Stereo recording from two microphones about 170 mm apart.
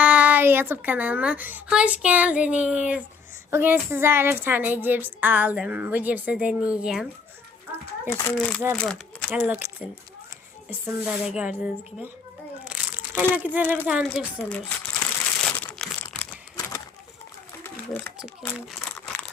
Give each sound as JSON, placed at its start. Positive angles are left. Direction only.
{"t": 0.0, "sound": "speech", "side_deg": -10}
{"t": 8.0, "sound": "a child's voice", "side_deg": 15}
{"t": 9.3, "sound": "speech", "side_deg": -10}
{"t": 11.0, "sound": "speech", "side_deg": -5}
{"t": 12.6, "sound": "crumpling", "side_deg": -5}
{"t": 14.3, "sound": "crumpling", "side_deg": 10}
{"t": 16.6, "sound": "a sound", "side_deg": 20}
{"t": 18.8, "sound": "crumpling", "side_deg": 5}